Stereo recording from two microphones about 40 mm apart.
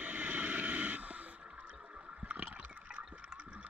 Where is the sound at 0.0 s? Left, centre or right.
Right.